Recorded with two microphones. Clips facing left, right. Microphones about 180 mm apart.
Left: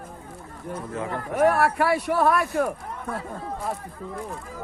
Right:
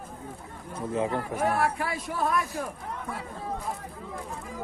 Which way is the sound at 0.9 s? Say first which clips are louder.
Right 4 dB; 25° right (ahead or behind).